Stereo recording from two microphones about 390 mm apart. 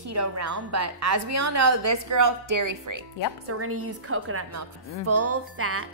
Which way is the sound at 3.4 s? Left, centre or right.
Right.